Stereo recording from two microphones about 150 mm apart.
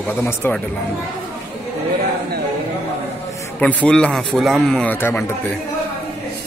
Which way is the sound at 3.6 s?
10° left (ahead or behind).